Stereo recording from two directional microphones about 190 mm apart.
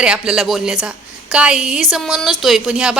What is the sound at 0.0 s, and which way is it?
A woman's voice, 5° right (ahead or behind).